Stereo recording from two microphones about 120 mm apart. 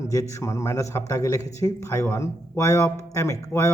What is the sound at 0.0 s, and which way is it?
Speech, 25° left (ahead or behind).